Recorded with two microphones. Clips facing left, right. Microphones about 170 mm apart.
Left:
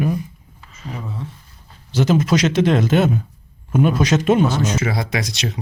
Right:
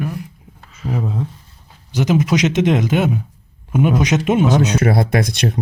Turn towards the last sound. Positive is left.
turn(degrees=-55)  # may be behind; listen again after turning